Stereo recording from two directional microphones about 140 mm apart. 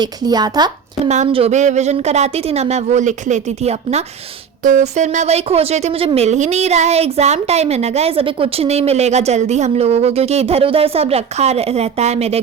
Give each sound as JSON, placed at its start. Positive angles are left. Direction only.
{"t": 0.0, "sound": "speech", "side_deg": -30}
{"t": 1.0, "sound": "speech", "side_deg": -50}
{"t": 4.6, "sound": "speech", "side_deg": -60}